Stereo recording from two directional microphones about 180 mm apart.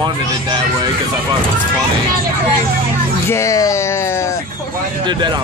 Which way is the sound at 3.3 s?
15° left (ahead or behind).